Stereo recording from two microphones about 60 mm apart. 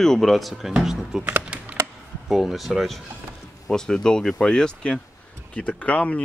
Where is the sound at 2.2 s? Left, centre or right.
Centre.